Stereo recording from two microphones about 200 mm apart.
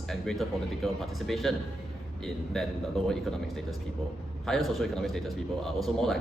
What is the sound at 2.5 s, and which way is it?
A man's voice, centre (ahead or behind).